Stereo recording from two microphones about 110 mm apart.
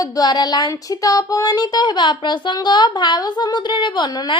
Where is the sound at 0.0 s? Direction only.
40° left (ahead or behind).